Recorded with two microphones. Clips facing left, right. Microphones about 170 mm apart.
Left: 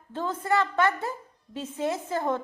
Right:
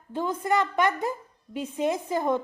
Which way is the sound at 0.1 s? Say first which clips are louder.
Right 1 dB; 15° right (ahead or behind).